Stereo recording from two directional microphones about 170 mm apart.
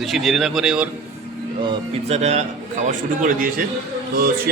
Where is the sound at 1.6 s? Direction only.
30° right (ahead or behind).